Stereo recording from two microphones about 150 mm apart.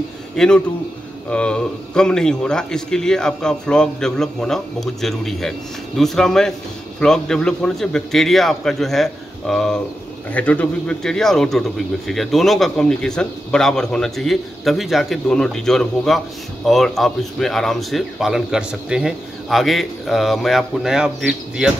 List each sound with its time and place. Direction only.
0.4 s a man's voice: 5° left (ahead or behind)